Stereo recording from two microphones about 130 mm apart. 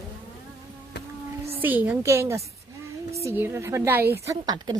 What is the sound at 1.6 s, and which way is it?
A woman's voice, 15° right (ahead or behind).